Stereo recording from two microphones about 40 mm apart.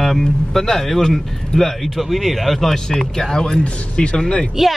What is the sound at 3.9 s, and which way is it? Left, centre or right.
Speech, left.